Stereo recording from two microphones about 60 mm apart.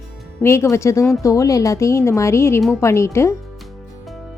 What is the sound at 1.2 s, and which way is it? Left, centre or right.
A woman's voice, left.